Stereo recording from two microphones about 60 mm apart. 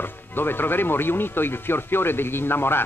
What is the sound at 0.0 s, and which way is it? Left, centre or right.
Speech, left.